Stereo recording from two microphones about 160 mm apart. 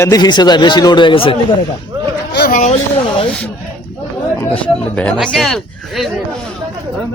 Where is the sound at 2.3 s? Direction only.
85° left.